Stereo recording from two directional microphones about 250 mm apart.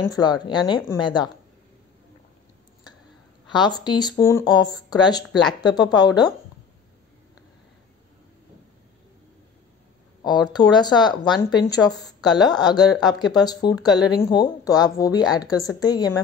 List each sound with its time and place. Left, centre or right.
0.1 s speech: centre
3.4 s speech: centre
10.2 s speech: centre
11.2 s a woman's voice: centre
12.4 s speech: centre